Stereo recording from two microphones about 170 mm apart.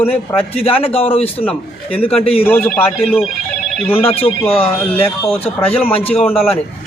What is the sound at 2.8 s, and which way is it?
A man's voice, 35° left (ahead or behind).